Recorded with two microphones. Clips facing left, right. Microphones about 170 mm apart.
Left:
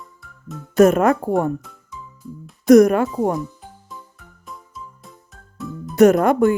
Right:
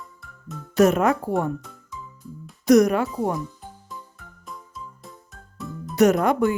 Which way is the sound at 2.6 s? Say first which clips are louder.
Left 5 dB; 50° left (ahead or behind).